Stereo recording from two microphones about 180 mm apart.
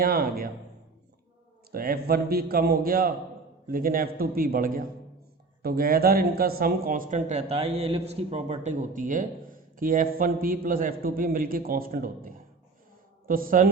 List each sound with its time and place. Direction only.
0.0 s a man's voice: 55° right (ahead or behind)
1.7 s a man's voice: 55° right (ahead or behind)